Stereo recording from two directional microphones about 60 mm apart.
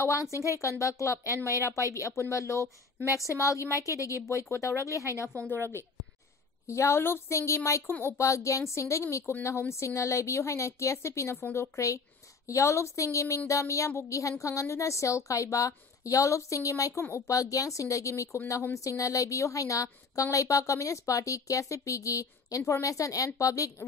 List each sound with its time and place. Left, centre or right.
0.0 s a woman's voice: left
6.7 s a woman's voice: left